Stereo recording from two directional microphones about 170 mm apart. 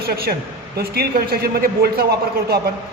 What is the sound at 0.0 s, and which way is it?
A man's voice, 70° right (ahead or behind).